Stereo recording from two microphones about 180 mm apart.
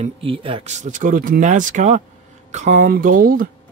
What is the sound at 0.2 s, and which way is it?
Speech, 30° right (ahead or behind).